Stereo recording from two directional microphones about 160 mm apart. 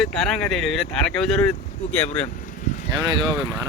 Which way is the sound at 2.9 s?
25° right (ahead or behind).